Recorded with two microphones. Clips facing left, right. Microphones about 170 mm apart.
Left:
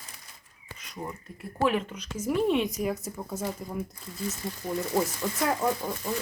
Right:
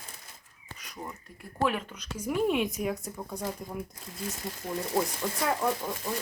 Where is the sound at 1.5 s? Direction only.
Centre (ahead or behind).